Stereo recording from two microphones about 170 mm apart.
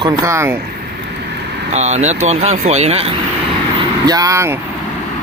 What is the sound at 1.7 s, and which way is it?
Speech, 40° right (ahead or behind).